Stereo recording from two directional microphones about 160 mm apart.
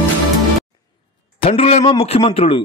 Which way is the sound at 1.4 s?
40° left (ahead or behind).